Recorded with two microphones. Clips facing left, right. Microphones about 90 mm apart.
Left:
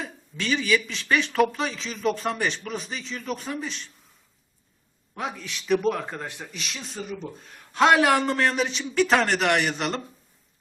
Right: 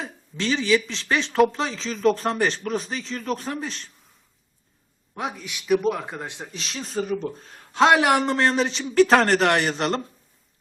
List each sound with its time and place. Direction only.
0.0 s speech: 30° right (ahead or behind)
5.1 s speech: 20° right (ahead or behind)
6.2 s speech: 20° right (ahead or behind)
6.5 s speech: 35° right (ahead or behind)
7.0 s speech: 65° right (ahead or behind)
7.3 s speech: 35° right (ahead or behind)